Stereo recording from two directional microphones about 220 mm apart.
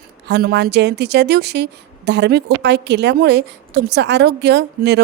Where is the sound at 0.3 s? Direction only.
50° right (ahead or behind).